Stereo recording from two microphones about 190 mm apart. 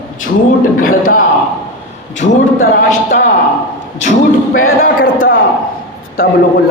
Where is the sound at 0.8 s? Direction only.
45° left (ahead or behind).